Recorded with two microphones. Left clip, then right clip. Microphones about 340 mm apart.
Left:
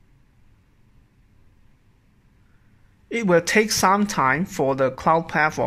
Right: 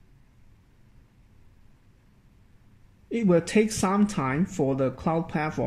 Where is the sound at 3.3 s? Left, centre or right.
Centre.